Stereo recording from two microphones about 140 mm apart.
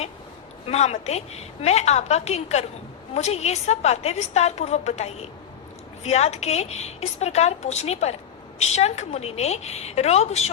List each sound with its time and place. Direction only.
0.7 s a woman's voice: 50° left (ahead or behind)